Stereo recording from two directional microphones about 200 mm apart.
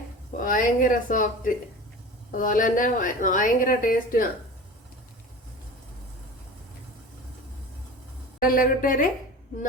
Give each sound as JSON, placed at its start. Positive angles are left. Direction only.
{"t": 0.3, "sound": "a woman's voice", "side_deg": 45}
{"t": 8.4, "sound": "speech", "side_deg": 45}